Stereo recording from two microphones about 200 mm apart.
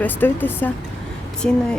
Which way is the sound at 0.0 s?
10° left (ahead or behind).